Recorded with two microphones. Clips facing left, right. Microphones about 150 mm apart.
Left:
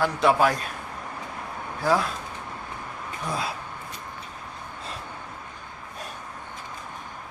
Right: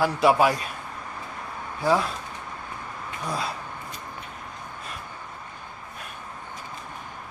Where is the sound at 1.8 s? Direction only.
Centre (ahead or behind).